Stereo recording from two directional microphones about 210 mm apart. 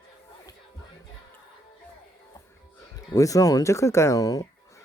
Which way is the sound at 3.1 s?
15° left (ahead or behind).